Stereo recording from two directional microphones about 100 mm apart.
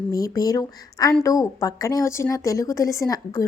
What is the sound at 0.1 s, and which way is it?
Speech, 35° left (ahead or behind).